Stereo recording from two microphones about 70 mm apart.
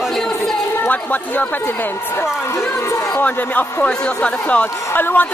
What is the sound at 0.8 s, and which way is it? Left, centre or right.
Speech, left.